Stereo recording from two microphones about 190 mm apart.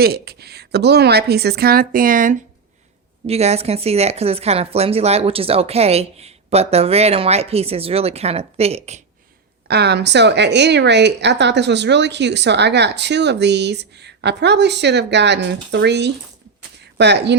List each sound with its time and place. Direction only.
0.0 s a woman's voice: 55° right (ahead or behind)
3.2 s speech: 35° right (ahead or behind)
9.6 s a woman's voice: 60° right (ahead or behind)